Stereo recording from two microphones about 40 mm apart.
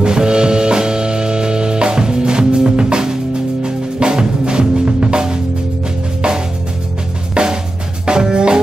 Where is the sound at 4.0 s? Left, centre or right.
Right.